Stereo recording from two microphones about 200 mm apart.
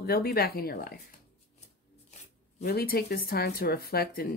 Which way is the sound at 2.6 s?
45° left (ahead or behind).